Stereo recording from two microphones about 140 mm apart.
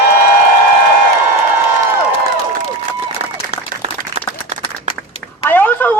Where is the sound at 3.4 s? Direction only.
55° right (ahead or behind).